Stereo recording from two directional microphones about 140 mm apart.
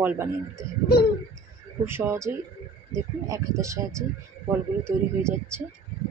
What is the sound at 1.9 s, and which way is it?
Speech, 20° right (ahead or behind).